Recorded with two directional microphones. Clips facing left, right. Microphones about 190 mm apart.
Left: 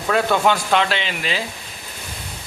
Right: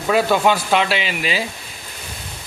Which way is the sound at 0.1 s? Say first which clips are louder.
Right 2 dB; 5° right (ahead or behind).